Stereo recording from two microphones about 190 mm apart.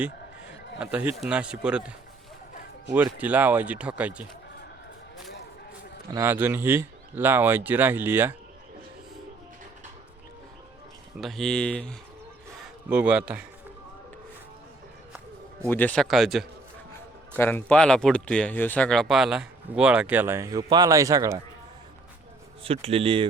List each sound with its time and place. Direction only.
0.8 s speech: 5° right (ahead or behind)
2.9 s speech: 10° right (ahead or behind)
6.1 s speech: 15° right (ahead or behind)
11.2 s speech: centre (ahead or behind)
12.6 s speech: 10° right (ahead or behind)
15.6 s speech: 10° left (ahead or behind)
17.3 s speech: 10° left (ahead or behind); by 21.4 s 15° right (ahead or behind)
22.6 s speech: 30° right (ahead or behind)